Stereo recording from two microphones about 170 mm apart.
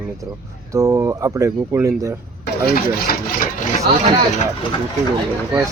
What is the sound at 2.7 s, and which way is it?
Speech, 55° left (ahead or behind).